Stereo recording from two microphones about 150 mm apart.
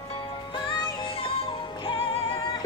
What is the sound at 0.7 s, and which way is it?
Music, 35° left (ahead or behind).